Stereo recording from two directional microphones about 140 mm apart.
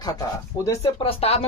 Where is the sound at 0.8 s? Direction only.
40° left (ahead or behind).